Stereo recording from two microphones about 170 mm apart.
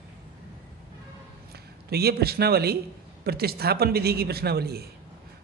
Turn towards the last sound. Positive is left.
turn(degrees=-70)  # may be behind; listen again after turning